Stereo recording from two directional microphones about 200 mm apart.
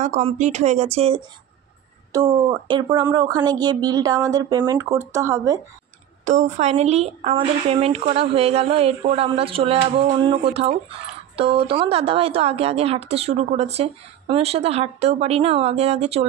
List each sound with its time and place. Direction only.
0.0 s speech: 35° right (ahead or behind)
2.1 s speech: 20° right (ahead or behind)
6.2 s speech: 35° right (ahead or behind)